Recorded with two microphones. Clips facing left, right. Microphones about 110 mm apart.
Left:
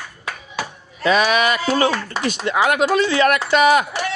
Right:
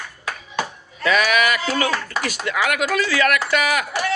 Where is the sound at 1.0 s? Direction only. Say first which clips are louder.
Left 2 dB; 25° left (ahead or behind).